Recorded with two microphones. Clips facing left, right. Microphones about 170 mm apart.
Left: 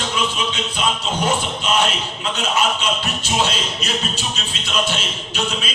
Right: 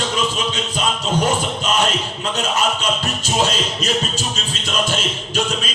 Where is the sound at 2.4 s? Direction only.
45° right (ahead or behind).